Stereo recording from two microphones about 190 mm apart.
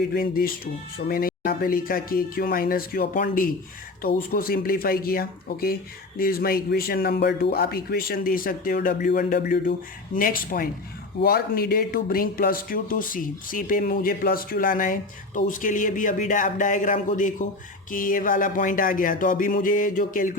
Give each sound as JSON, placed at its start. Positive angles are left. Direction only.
{"t": 0.1, "sound": "a man's voice", "side_deg": 50}